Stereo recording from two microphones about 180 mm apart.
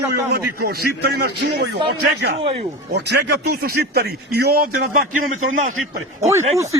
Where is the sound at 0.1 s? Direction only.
60° right (ahead or behind).